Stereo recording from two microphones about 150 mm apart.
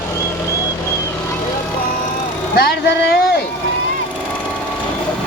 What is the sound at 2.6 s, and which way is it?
Speech, 90° left.